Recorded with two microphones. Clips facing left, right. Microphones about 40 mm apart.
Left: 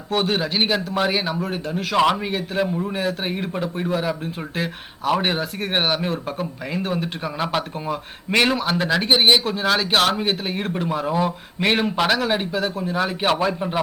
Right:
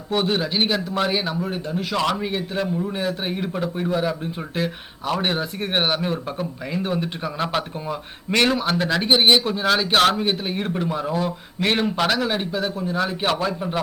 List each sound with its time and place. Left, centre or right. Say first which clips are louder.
0.1 s speech: even; centre